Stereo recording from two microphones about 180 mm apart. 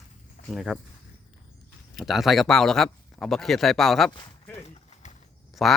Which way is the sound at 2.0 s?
Centre (ahead or behind).